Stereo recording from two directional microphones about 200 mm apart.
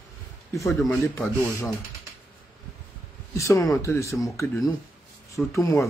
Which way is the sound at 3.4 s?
15° left (ahead or behind).